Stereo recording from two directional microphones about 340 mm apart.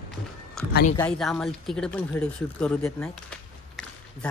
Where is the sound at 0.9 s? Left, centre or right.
Centre.